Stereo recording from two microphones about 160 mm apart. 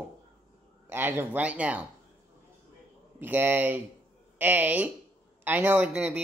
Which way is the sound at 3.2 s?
10° right (ahead or behind).